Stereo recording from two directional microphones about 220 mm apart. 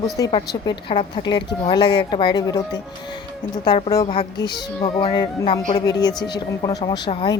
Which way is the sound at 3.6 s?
20° left (ahead or behind).